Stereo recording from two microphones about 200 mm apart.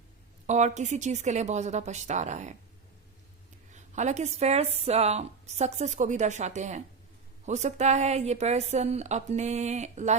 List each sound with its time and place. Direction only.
0.4 s speech: 35° right (ahead or behind)
3.7 s speech: 35° right (ahead or behind)